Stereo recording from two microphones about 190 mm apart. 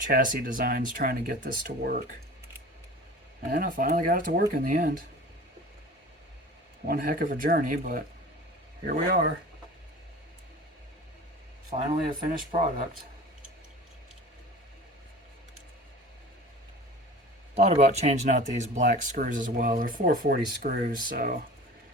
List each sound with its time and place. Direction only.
0.1 s speech: 50° right (ahead or behind)
3.5 s speech: 50° right (ahead or behind)
6.8 s speech: 50° right (ahead or behind)
11.7 s speech: 35° right (ahead or behind)
17.5 s speech: 35° right (ahead or behind)